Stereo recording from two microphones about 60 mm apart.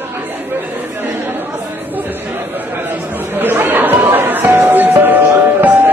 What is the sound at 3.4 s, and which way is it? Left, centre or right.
Music, right.